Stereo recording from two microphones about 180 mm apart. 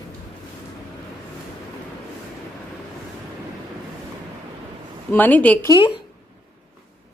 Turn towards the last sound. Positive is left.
turn(degrees=20)  # may be behind; listen again after turning